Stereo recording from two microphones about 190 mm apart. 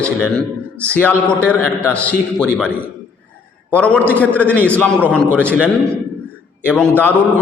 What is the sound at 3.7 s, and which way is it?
A man's voice, 5° left (ahead or behind).